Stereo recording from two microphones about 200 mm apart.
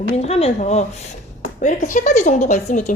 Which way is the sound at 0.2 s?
30° left (ahead or behind).